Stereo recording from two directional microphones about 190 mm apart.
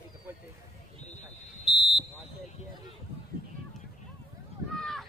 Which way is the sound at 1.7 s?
25° left (ahead or behind).